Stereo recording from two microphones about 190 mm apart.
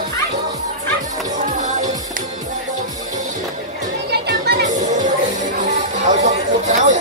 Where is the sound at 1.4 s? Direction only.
40° right (ahead or behind).